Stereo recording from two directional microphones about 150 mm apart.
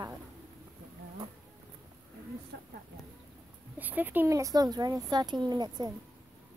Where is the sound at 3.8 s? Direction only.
10° right (ahead or behind); by 5.9 s 25° right (ahead or behind).